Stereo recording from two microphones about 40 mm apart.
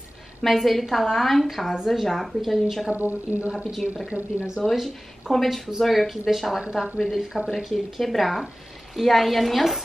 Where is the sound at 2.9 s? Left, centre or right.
Right.